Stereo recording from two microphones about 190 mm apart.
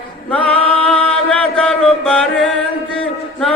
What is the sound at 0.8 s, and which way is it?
Chant, 5° left (ahead or behind).